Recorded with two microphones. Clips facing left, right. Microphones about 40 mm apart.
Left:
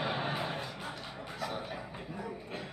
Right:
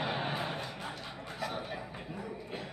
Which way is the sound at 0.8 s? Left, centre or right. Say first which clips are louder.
Even; centre.